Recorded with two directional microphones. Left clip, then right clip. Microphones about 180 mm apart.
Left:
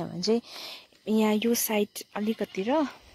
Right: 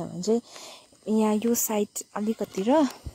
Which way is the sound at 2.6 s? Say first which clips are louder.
Right 5 dB; 25° right (ahead or behind).